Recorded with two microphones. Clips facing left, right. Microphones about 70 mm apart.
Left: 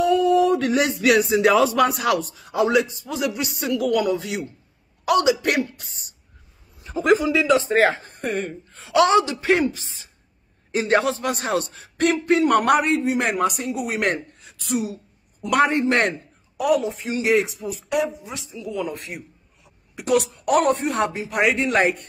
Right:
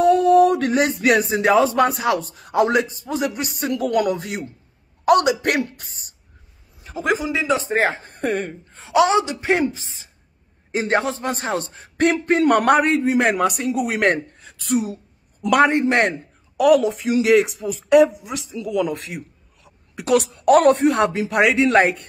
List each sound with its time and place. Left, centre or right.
0.0 s a sound: right
2.3 s speech: right
7.4 s speech: right
8.1 s speech: right
8.7 s speech: right
12.0 s speech: right
15.6 s a man's voice: right
16.5 s speech: right
17.6 s speech: right
18.0 s speech: right
20.0 s speech: right